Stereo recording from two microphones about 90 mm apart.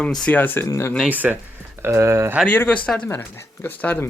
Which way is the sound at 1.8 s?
30° right (ahead or behind).